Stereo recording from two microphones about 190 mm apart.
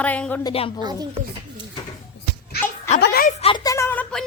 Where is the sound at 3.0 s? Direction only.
55° left (ahead or behind).